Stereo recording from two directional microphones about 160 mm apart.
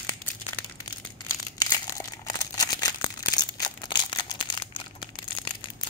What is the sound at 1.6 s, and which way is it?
Crumpling, 25° left (ahead or behind).